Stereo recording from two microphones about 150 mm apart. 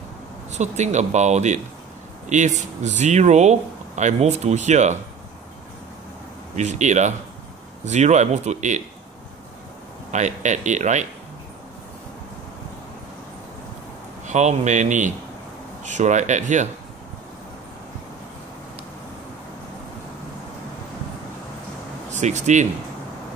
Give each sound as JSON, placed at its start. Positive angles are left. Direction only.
{"t": 0.5, "sound": "speech", "side_deg": -50}
{"t": 6.5, "sound": "speech", "side_deg": -50}
{"t": 10.1, "sound": "speech", "side_deg": -50}
{"t": 14.2, "sound": "speech", "side_deg": -50}
{"t": 22.1, "sound": "speech", "side_deg": -50}